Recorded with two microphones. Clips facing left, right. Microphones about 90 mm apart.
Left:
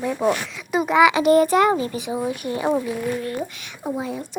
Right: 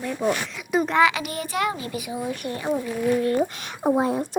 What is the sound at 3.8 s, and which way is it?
Speech, 45° right (ahead or behind).